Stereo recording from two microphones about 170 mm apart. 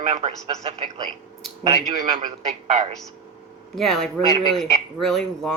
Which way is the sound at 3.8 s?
Centre (ahead or behind).